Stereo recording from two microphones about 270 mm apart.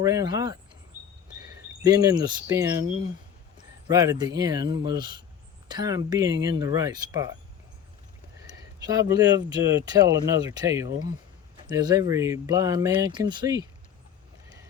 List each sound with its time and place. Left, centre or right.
0.0 s speech: centre
8.8 s speech: centre